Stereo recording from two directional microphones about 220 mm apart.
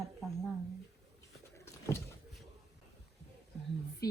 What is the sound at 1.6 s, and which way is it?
Vehicle, 15° left (ahead or behind).